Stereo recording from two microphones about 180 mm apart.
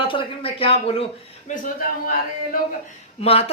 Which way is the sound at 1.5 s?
50° left (ahead or behind).